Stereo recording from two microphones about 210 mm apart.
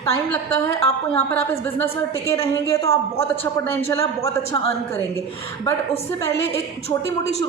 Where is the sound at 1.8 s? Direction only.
15° left (ahead or behind).